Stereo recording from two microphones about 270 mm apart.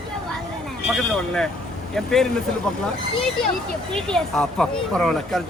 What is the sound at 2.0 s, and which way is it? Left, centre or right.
Speech, centre.